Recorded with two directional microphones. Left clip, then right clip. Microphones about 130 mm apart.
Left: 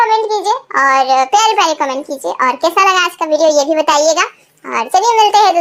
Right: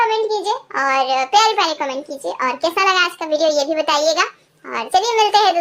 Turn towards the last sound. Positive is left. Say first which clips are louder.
# left 5 dB
turn(degrees=25)  # may be behind; listen again after turning